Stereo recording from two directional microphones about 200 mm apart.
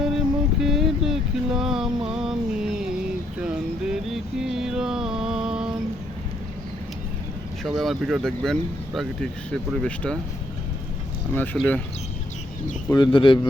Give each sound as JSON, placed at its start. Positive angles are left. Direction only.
{"t": 0.6, "sound": "a sound", "side_deg": 0}
{"t": 7.6, "sound": "speech", "side_deg": 0}
{"t": 11.3, "sound": "speech", "side_deg": 5}
{"t": 12.9, "sound": "speech", "side_deg": 25}